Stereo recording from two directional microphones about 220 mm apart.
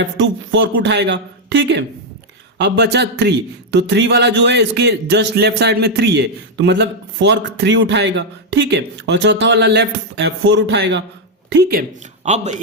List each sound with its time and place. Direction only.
0.0 s a man's voice: 55° right (ahead or behind); by 12.5 s 30° right (ahead or behind)